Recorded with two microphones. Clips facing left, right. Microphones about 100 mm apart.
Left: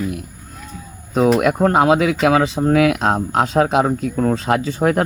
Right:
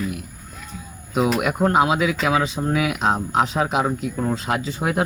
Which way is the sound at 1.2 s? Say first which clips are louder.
Left 5 dB; 45° left (ahead or behind).